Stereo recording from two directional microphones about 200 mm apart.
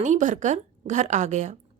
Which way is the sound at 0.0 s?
40° right (ahead or behind).